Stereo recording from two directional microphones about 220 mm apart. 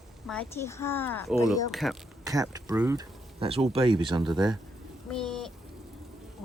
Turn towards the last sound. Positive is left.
turn(degrees=0)  # may be behind; listen again after turning